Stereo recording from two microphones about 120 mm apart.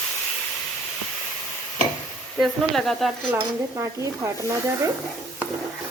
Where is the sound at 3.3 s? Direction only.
25° right (ahead or behind).